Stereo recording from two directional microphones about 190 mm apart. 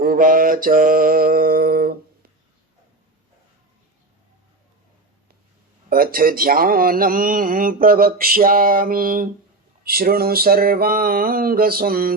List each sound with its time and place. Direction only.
0.0 s mantra: 50° right (ahead or behind)
5.9 s speech: 50° right (ahead or behind)